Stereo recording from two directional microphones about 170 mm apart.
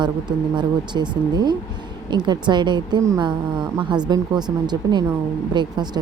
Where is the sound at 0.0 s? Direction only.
25° right (ahead or behind).